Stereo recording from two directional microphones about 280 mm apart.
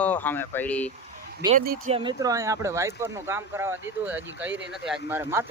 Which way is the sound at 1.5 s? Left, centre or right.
Right.